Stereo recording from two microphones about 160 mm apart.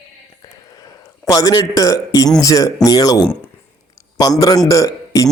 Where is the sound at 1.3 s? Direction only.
25° left (ahead or behind).